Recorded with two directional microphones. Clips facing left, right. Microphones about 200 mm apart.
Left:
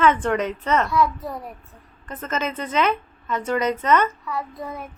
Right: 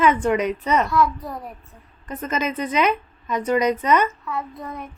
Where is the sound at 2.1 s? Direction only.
15° right (ahead or behind).